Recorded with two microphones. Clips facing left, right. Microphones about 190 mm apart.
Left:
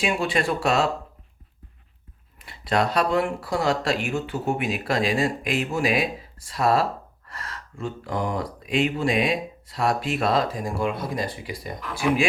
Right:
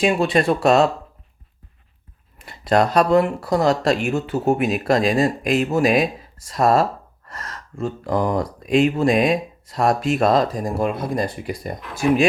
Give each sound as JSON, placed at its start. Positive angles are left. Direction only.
{"t": 0.0, "sound": "speech", "side_deg": -40}
{"t": 2.4, "sound": "speech", "side_deg": -45}